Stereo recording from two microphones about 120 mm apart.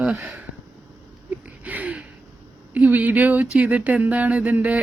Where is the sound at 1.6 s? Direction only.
10° right (ahead or behind).